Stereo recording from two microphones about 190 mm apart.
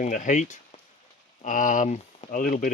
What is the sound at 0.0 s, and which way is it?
Speech, 40° left (ahead or behind).